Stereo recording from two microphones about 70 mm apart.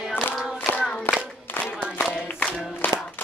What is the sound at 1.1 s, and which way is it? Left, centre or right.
Clapping, left.